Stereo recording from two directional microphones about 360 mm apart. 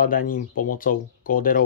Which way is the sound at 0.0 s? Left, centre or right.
Left.